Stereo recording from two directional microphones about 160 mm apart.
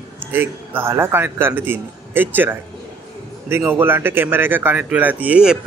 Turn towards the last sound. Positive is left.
turn(degrees=-5)  # may be behind; listen again after turning